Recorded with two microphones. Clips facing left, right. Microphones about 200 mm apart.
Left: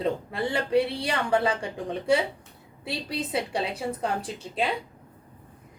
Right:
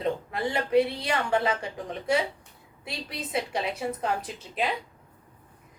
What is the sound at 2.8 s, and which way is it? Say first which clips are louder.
A woman's voice: left 5 dB; 30° left (ahead or behind).